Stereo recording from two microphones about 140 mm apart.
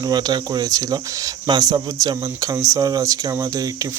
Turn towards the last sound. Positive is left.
turn(degrees=-25)  # may be behind; listen again after turning